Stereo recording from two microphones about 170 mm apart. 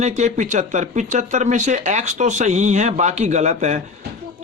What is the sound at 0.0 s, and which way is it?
Speech, 45° right (ahead or behind).